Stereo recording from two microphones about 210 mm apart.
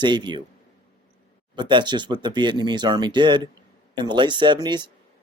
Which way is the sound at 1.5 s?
20° right (ahead or behind).